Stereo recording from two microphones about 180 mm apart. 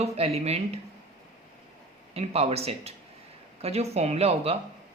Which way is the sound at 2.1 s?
35° right (ahead or behind).